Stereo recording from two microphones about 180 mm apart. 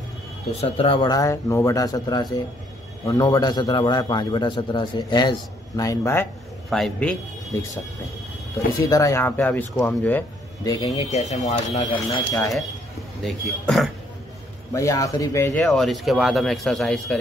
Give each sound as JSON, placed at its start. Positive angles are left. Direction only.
{"t": 0.6, "sound": "a man's voice", "side_deg": 30}
{"t": 6.7, "sound": "speech", "side_deg": 5}
{"t": 8.8, "sound": "speech", "side_deg": 20}
{"t": 10.6, "sound": "a man's voice", "side_deg": 20}
{"t": 11.1, "sound": "speech", "side_deg": 40}
{"t": 13.2, "sound": "speech", "side_deg": 0}
{"t": 14.7, "sound": "speech", "side_deg": 15}
{"t": 15.6, "sound": "speech", "side_deg": 0}